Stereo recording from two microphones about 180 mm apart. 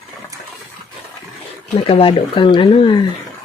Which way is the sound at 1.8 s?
30° left (ahead or behind).